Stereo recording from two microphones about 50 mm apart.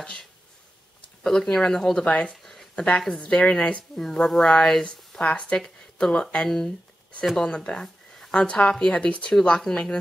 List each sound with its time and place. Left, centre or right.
0.0 s speech: centre
2.4 s a sound: centre
2.7 s a woman's voice: left
4.0 s speech: centre
5.2 s a woman's voice: left
6.0 s speech: centre
7.4 s a sound: centre
8.4 s a woman's voice: centre